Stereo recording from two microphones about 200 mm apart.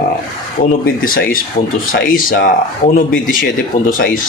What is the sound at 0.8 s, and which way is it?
Speech, 45° left (ahead or behind).